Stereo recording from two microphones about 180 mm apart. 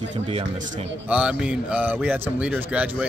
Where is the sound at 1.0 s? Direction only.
5° right (ahead or behind).